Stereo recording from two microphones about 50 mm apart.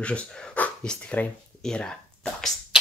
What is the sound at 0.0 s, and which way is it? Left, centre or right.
Speech, left.